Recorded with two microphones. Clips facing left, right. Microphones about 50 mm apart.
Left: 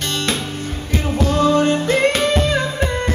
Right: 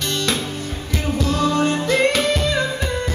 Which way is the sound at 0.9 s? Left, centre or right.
Left.